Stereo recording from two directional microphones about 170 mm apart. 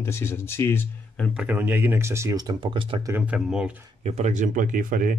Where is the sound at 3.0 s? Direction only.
15° right (ahead or behind).